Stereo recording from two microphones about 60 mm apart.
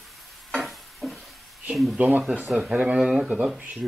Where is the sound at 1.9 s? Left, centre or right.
Right.